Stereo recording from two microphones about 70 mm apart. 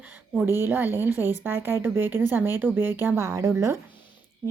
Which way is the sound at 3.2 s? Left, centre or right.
Right.